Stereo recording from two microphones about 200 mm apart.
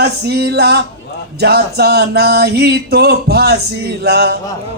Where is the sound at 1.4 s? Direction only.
55° right (ahead or behind).